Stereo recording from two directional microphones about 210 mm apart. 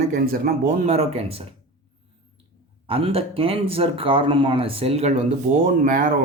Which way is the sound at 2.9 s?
25° right (ahead or behind).